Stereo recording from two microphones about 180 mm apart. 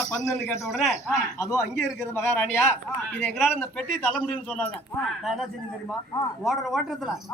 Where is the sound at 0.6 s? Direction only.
Centre (ahead or behind).